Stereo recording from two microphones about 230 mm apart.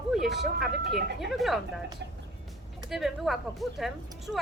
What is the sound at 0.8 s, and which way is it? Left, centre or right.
Speech, right.